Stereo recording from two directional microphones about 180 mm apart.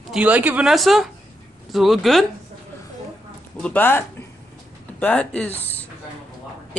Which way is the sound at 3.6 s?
10° left (ahead or behind).